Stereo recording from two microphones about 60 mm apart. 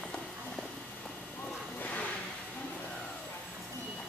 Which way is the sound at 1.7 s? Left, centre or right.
Left.